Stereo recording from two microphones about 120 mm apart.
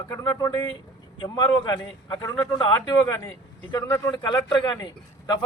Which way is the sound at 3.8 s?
25° left (ahead or behind).